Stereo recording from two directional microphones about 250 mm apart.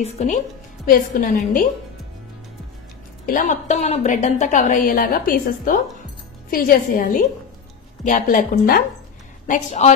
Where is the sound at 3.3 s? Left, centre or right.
Left.